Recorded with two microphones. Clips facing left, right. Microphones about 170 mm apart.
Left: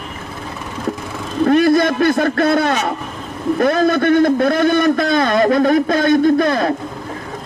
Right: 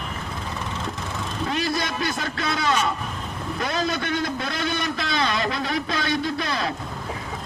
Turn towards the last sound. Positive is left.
turn(degrees=50)  # may be behind; listen again after turning